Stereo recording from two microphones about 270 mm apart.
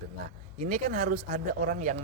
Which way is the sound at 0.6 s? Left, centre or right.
Right.